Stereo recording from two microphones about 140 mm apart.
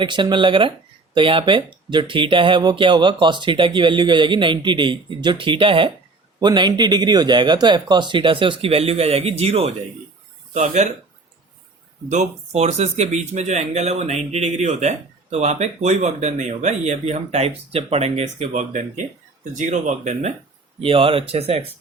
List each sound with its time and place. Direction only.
0.0 s speech: 35° right (ahead or behind)
10.5 s speech: 60° right (ahead or behind)
12.1 s speech: 50° right (ahead or behind)
20.8 s speech: 40° right (ahead or behind)